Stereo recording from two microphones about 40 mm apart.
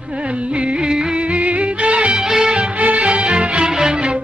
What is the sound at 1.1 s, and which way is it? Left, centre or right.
Music, right.